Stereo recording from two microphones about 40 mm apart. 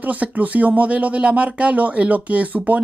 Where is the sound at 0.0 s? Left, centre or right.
Right.